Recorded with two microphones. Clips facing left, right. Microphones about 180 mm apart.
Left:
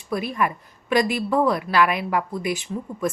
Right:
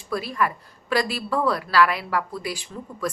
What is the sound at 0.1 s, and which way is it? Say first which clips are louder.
A woman's voice: left 1 dB; 20° left (ahead or behind).